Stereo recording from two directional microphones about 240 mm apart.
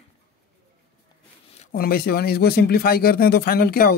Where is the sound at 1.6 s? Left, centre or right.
Left.